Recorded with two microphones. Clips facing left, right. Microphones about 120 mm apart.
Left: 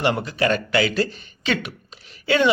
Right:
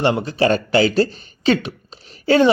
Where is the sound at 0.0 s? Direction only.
30° right (ahead or behind).